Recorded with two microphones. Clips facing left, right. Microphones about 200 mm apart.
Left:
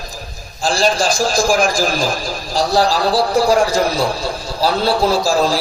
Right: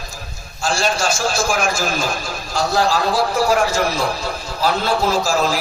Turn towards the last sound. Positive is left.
turn(degrees=35)  # may be behind; listen again after turning